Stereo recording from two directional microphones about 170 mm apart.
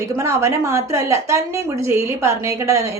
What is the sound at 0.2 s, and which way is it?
A woman's voice, 15° right (ahead or behind).